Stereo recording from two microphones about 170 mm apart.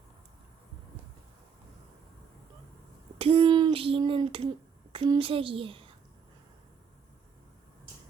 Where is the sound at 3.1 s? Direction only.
35° right (ahead or behind).